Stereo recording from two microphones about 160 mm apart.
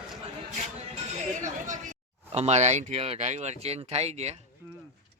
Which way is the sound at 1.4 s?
50° right (ahead or behind).